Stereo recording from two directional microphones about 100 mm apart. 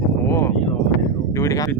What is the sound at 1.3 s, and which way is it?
Speech, 35° left (ahead or behind).